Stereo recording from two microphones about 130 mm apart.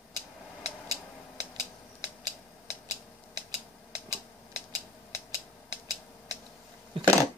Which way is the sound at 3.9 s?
30° right (ahead or behind).